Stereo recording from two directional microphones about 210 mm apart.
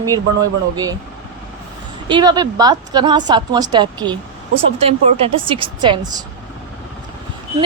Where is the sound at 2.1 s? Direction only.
20° right (ahead or behind).